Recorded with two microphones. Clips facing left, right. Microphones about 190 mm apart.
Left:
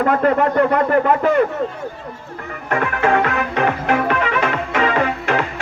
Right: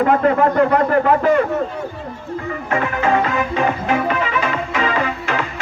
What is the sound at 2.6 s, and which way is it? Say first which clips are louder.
Music: left 1 dB; 55° left (ahead or behind).